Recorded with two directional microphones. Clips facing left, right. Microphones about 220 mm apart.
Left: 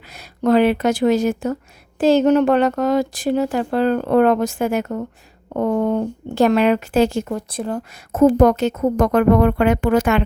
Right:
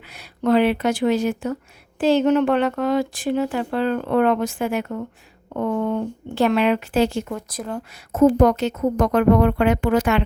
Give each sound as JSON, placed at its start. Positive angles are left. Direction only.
{"t": 0.1, "sound": "speech", "side_deg": 40}
{"t": 8.1, "sound": "speech", "side_deg": 50}